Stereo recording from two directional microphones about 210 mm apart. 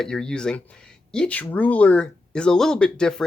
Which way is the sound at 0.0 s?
5° left (ahead or behind).